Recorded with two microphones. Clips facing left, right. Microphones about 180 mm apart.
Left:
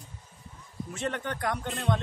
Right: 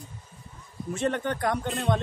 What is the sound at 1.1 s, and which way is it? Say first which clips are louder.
Speech: right 3 dB; 35° right (ahead or behind).